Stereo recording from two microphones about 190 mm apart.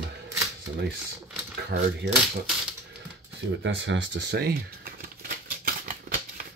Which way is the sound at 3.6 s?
75° right (ahead or behind).